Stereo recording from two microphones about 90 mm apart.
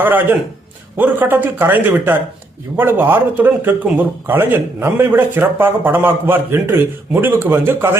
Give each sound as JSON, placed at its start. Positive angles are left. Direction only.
{"t": 0.0, "sound": "speech", "side_deg": -20}